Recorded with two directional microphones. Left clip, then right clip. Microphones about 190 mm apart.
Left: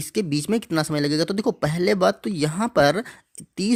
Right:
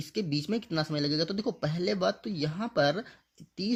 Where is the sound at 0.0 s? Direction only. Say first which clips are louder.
Left 8 dB; 40° left (ahead or behind).